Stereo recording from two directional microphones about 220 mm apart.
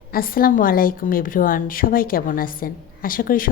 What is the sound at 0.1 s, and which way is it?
A woman's voice, 40° left (ahead or behind).